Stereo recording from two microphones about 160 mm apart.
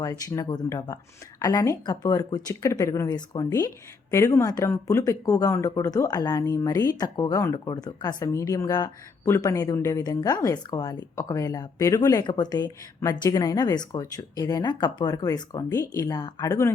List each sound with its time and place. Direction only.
0.0 s speech: 20° left (ahead or behind)